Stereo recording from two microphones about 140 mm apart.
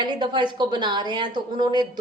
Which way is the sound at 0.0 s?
35° right (ahead or behind).